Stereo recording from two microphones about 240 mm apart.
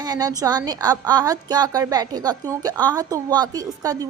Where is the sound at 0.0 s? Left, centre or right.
Centre.